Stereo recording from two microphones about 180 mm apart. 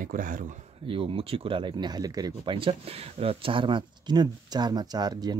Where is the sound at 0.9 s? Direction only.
30° right (ahead or behind).